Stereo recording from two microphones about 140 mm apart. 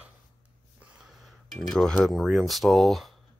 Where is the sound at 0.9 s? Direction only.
Centre (ahead or behind).